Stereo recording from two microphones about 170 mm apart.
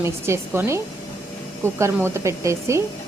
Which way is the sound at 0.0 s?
15° right (ahead or behind).